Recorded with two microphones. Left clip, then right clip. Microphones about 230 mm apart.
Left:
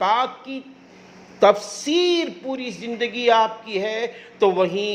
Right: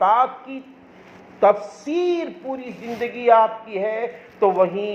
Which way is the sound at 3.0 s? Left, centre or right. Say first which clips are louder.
Right 2 dB; left.